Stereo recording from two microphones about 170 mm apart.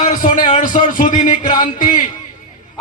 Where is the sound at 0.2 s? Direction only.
50° left (ahead or behind).